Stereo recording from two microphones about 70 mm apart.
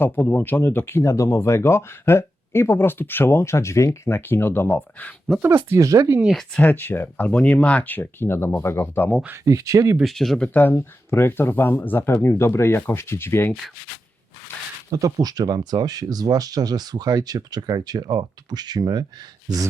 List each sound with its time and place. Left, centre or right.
0.0 s speech: left
5.4 s speech: right
5.7 s speech: right
6.6 s speech: left
9.4 s speech: right
10.0 s speech: centre
10.4 s speech: left
10.8 s speech: left
14.9 s speech: right